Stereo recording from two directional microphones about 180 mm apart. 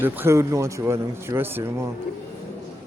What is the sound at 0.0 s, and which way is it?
Speech, 15° right (ahead or behind).